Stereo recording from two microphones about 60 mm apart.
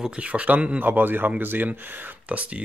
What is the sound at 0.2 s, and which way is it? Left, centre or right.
A man's voice, right.